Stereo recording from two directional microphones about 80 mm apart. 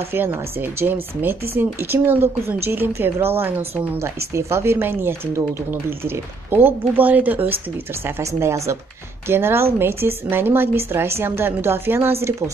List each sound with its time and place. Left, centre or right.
0.1 s speech: right
8.0 s speech: right